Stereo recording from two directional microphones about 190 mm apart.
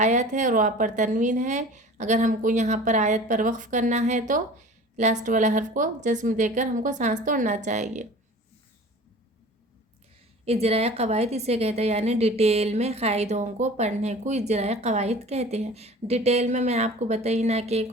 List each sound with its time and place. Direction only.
0.0 s a woman's voice: 40° right (ahead or behind)
10.4 s a woman's voice: 35° right (ahead or behind)